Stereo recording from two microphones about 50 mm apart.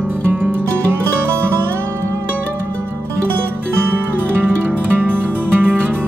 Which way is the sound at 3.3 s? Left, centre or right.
Right.